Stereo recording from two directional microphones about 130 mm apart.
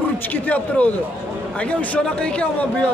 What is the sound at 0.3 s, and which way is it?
Speech, 10° left (ahead or behind).